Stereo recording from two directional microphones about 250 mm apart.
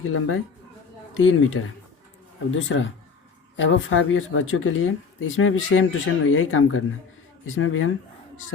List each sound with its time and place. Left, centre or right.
0.0 s speech: left